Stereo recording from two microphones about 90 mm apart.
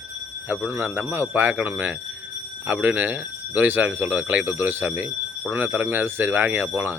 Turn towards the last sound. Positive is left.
turn(degrees=-20)  # may be behind; listen again after turning